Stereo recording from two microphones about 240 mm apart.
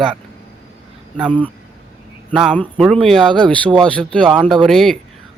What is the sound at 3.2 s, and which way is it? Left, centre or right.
Speech, centre.